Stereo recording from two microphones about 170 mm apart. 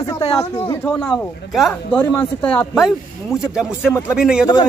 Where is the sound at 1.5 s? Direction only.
Centre (ahead or behind).